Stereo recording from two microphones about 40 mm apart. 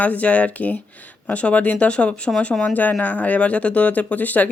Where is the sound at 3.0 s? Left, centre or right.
Left.